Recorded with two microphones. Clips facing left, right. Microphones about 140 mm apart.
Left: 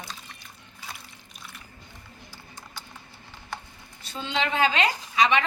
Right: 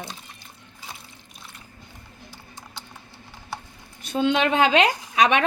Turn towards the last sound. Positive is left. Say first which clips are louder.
# right 3 dB
turn(degrees=-70)  # may be behind; listen again after turning